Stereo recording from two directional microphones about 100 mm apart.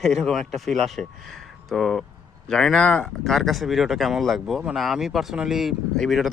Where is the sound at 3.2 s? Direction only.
Centre (ahead or behind).